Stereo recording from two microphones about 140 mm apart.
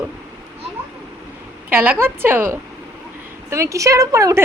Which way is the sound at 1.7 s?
15° right (ahead or behind).